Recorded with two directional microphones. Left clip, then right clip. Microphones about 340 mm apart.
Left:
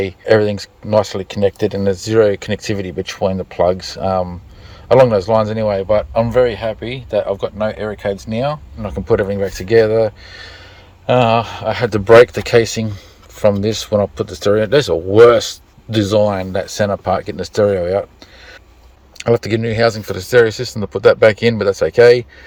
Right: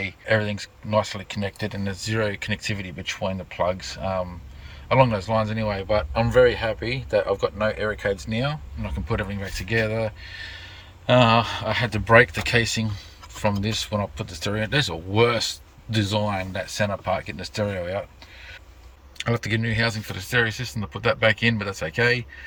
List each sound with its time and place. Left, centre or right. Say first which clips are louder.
0.0 s speech: left 10 dB; centre
19.1 s speech: left 11 dB; centre